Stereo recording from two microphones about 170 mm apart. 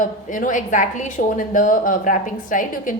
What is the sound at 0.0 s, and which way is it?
A woman's voice, 50° left (ahead or behind).